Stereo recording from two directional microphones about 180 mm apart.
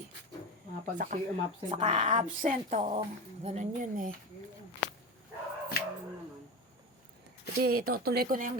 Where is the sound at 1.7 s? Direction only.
40° right (ahead or behind).